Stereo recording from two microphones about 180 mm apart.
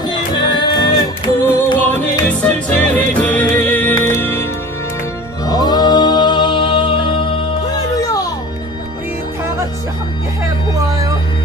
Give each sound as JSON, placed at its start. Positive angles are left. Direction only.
{"t": 0.0, "sound": "music", "side_deg": 25}
{"t": 1.4, "sound": "music", "side_deg": 10}
{"t": 5.5, "sound": "music", "side_deg": 20}
{"t": 10.8, "sound": "a sound", "side_deg": -20}